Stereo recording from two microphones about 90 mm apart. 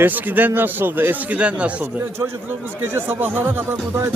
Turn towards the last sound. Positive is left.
turn(degrees=-25)  # may be behind; listen again after turning